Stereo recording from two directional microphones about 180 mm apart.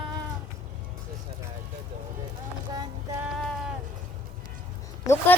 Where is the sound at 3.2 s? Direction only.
Centre (ahead or behind).